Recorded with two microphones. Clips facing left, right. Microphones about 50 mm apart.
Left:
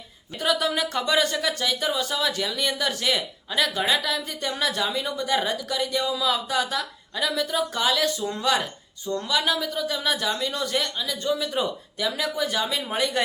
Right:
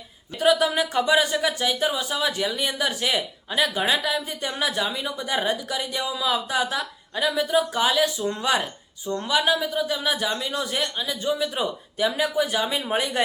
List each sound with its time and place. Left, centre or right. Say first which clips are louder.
0.3 s speech: right 4 dB; centre